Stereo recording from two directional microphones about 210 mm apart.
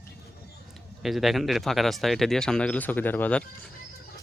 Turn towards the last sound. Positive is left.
turn(degrees=5)  # may be behind; listen again after turning